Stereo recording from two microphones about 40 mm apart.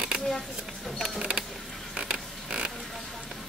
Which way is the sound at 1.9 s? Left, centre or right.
Centre.